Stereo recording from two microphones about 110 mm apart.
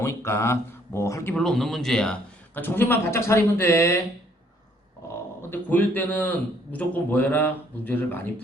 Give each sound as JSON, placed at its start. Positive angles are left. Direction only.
{"t": 0.0, "sound": "speech", "side_deg": 25}
{"t": 1.3, "sound": "a man's voice", "side_deg": 5}
{"t": 2.6, "sound": "speech", "side_deg": 20}
{"t": 5.4, "sound": "a man's voice", "side_deg": 20}